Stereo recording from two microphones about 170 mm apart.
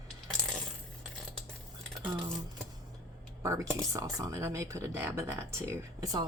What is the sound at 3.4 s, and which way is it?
Speech, 15° right (ahead or behind).